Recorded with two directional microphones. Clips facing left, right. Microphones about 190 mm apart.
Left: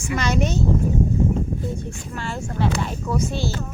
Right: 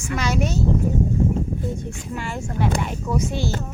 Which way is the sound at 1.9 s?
15° right (ahead or behind).